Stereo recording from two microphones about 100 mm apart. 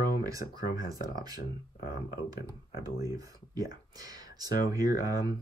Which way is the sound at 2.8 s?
35° right (ahead or behind).